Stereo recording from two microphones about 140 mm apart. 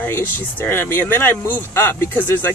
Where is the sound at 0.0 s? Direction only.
15° left (ahead or behind).